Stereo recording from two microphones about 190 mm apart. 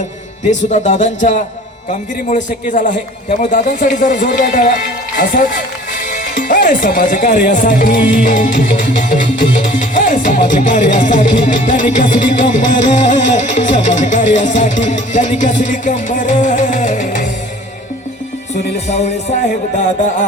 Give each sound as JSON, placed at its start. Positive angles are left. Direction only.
{"t": 0.7, "sound": "music", "side_deg": 35}
{"t": 2.3, "sound": "a man's voice", "side_deg": 40}
{"t": 7.3, "sound": "music", "side_deg": 45}
{"t": 18.5, "sound": "music", "side_deg": 35}